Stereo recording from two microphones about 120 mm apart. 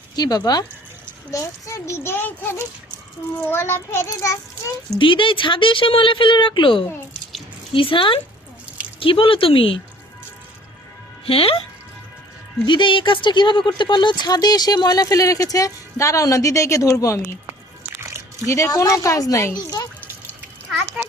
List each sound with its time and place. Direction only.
0.2 s a child's voice: 35° left (ahead or behind)
4.9 s speech: 45° left (ahead or behind)
11.3 s speech: 50° left (ahead or behind)
12.6 s speech: 40° left (ahead or behind); by 17.2 s 25° left (ahead or behind)
18.4 s a child's voice: 25° left (ahead or behind)
20.7 s children playing: 5° right (ahead or behind)